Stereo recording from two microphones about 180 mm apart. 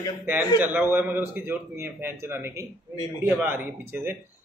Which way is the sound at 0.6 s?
10° right (ahead or behind).